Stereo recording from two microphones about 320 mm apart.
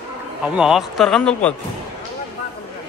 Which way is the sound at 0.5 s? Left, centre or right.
Centre.